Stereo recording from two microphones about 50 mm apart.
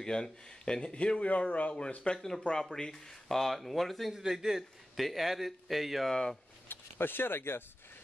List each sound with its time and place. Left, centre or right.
0.0 s a man's voice: centre
2.4 s speech: centre
4.1 s a man's voice: centre
6.0 s speech: centre
6.7 s speech: left